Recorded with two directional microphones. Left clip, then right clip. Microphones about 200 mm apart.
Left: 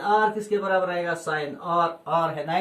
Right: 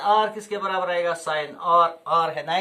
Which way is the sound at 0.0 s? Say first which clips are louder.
Right 1 dB; 20° right (ahead or behind).